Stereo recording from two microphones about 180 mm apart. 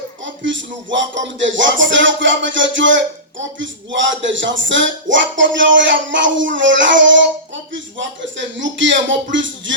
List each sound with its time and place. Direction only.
0.4 s music: 90° right